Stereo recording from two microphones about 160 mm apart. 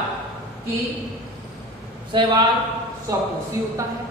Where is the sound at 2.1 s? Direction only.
30° right (ahead or behind).